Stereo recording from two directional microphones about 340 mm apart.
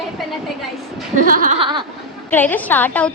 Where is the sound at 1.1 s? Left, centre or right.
Right.